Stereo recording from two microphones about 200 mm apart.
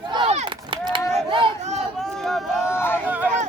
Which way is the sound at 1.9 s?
Centre (ahead or behind).